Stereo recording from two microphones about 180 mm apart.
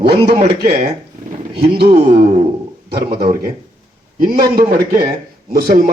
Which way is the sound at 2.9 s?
60° right (ahead or behind).